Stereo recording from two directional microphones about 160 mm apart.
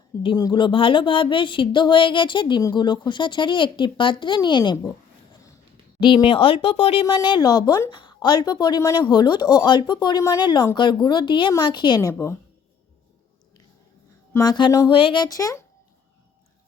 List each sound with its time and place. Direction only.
0.2 s a woman's voice: 25° left (ahead or behind)
6.0 s a woman's voice: 30° left (ahead or behind)
14.3 s speech: 25° left (ahead or behind)